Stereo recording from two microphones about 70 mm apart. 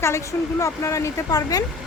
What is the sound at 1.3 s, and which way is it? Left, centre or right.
Speech, left.